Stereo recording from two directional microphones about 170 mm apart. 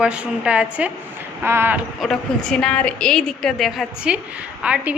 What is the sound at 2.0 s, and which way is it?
A woman's voice, centre (ahead or behind).